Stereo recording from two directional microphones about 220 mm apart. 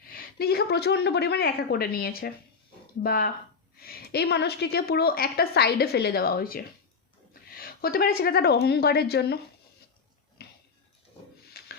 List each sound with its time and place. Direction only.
0.1 s a woman's voice: 45° left (ahead or behind)
10.4 s a sound: 45° left (ahead or behind)
11.6 s music: 45° left (ahead or behind)